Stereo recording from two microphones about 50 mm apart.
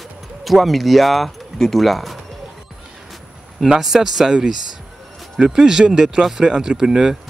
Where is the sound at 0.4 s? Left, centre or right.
Centre.